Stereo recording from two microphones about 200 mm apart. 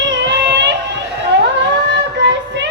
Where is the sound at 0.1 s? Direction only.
65° right (ahead or behind).